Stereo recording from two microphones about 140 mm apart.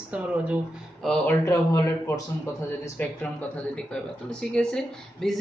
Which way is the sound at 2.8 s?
15° left (ahead or behind).